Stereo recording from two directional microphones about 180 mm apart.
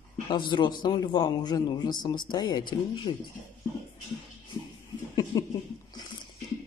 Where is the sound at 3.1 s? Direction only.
35° left (ahead or behind).